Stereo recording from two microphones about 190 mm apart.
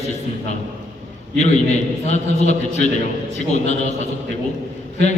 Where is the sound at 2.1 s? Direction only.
35° left (ahead or behind).